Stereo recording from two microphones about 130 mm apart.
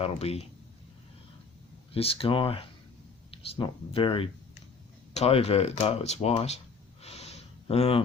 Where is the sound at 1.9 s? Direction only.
45° left (ahead or behind).